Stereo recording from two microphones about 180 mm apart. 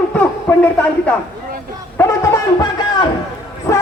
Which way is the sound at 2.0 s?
20° left (ahead or behind).